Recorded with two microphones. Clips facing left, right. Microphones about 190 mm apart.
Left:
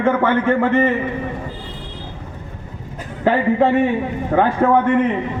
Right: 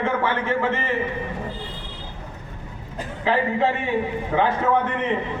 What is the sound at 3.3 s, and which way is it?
Speech, 55° left (ahead or behind).